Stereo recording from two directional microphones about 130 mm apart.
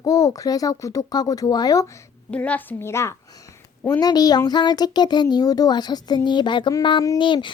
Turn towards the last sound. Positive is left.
turn(degrees=40)  # may be behind; listen again after turning